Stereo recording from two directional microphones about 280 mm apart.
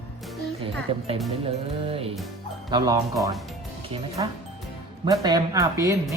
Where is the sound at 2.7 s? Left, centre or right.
Centre.